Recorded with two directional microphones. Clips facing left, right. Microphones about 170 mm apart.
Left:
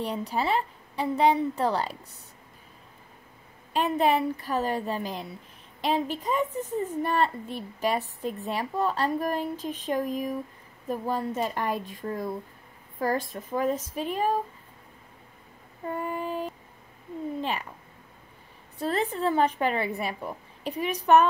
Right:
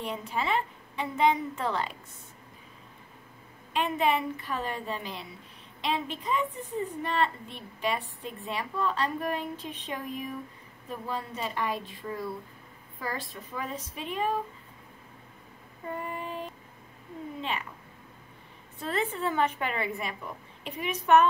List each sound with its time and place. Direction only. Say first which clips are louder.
0.0 s a woman's voice: left 4 dB; 35° left (ahead or behind)
3.7 s a woman's voice: left 3 dB; 40° left (ahead or behind)
15.9 s a woman's voice: left 5 dB; 40° left (ahead or behind)
18.8 s a woman's voice: left 3 dB; 35° left (ahead or behind)